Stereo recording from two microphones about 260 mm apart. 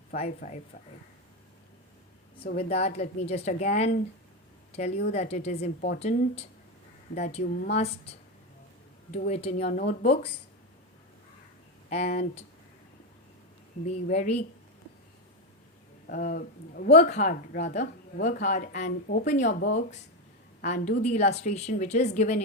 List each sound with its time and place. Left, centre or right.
0.1 s speech: left
2.5 s a woman's voice: left
9.1 s speech: left
11.9 s speech: left
13.8 s speech: left
16.0 s speech: left